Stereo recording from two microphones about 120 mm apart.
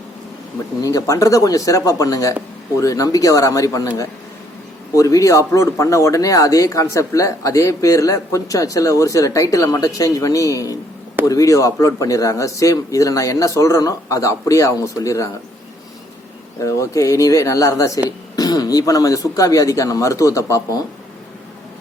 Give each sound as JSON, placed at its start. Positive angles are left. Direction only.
{"t": 0.8, "sound": "speech", "side_deg": 30}
{"t": 16.6, "sound": "speech", "side_deg": 25}